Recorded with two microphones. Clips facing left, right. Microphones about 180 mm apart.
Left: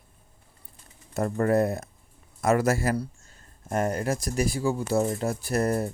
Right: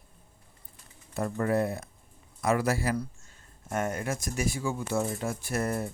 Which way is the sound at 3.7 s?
35° left (ahead or behind).